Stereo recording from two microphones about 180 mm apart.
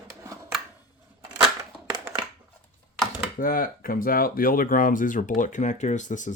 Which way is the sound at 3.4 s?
50° left (ahead or behind).